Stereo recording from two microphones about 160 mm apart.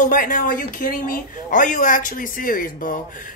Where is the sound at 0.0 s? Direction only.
55° left (ahead or behind).